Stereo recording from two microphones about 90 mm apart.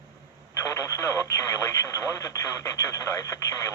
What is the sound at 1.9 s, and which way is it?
Speech, 35° left (ahead or behind).